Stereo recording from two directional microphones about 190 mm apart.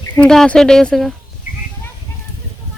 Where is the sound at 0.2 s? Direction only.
5° left (ahead or behind).